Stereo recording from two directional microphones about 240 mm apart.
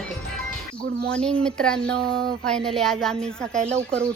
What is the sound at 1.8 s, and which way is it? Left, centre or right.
Speech, right.